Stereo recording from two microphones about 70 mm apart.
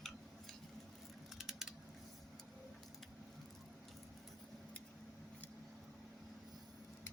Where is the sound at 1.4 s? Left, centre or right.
Centre.